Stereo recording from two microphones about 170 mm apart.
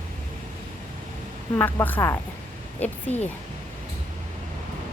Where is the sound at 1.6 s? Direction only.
10° left (ahead or behind).